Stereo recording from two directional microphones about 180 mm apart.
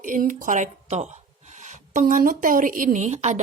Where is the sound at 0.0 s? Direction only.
45° right (ahead or behind).